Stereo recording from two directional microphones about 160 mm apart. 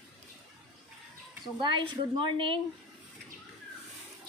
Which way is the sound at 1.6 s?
30° right (ahead or behind).